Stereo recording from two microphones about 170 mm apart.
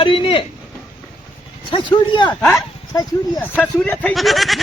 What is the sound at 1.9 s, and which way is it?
Speech, 25° left (ahead or behind).